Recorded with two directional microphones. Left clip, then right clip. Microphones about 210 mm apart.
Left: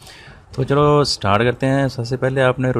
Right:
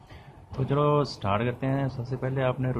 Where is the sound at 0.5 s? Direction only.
45° left (ahead or behind).